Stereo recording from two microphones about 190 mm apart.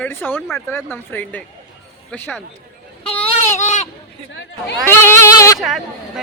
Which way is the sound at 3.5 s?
40° left (ahead or behind).